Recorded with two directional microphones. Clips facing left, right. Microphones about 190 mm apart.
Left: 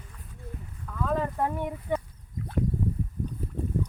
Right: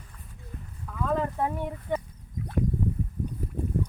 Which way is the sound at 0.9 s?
5° right (ahead or behind).